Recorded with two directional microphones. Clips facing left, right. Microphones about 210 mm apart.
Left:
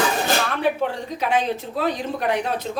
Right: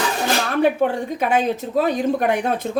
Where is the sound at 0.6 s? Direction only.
50° right (ahead or behind).